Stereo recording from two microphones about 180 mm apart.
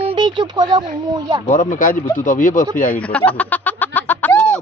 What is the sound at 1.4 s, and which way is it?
Speech, 45° left (ahead or behind).